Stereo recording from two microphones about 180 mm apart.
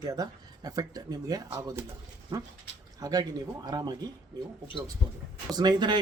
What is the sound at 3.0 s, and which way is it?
Speech, 20° right (ahead or behind).